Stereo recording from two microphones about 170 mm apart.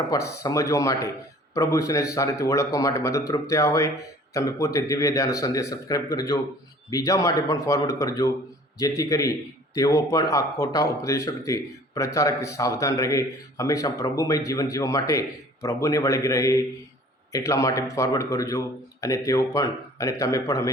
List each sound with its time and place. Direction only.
0.1 s speech: 20° left (ahead or behind)